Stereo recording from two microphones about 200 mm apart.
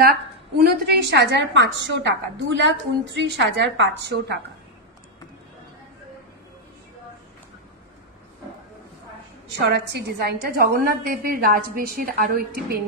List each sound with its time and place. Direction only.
0.0 s a woman's voice: 50° right (ahead or behind)
9.6 s a woman's voice: 55° right (ahead or behind)